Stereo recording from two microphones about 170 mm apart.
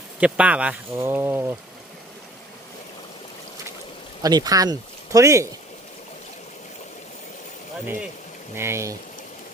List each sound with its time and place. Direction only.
0.2 s speech: 5° right (ahead or behind)
4.2 s speech: 25° right (ahead or behind)
8.5 s speech: 15° right (ahead or behind)